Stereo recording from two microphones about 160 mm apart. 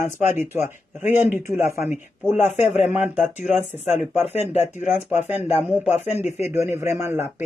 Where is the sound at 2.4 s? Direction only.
45° left (ahead or behind).